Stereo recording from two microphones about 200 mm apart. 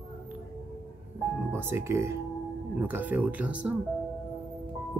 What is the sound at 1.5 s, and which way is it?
Speech, 10° right (ahead or behind).